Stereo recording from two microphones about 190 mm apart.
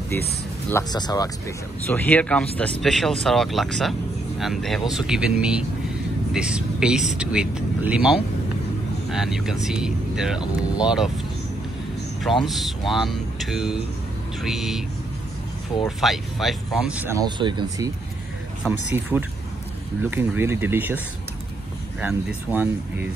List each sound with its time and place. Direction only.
0.7 s speech: 20° left (ahead or behind)
1.9 s speech: 10° left (ahead or behind)
12.4 s speech: centre (ahead or behind)
16.0 s speech: centre (ahead or behind)
17.2 s speech: 25° right (ahead or behind)
18.7 s speech: 10° right (ahead or behind)
22.0 s speech: 10° right (ahead or behind)